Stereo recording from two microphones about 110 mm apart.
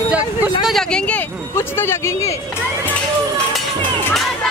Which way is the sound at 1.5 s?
20° left (ahead or behind).